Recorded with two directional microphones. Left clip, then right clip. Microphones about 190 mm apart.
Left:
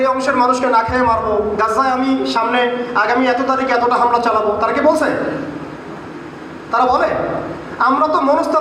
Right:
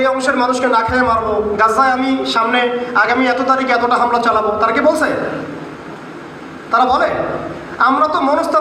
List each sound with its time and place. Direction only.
0.0 s a man's voice: 15° right (ahead or behind)
6.7 s a man's voice: 15° right (ahead or behind)